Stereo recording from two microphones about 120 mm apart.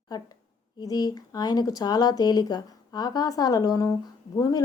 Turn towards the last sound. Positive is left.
turn(degrees=30)  # may be behind; listen again after turning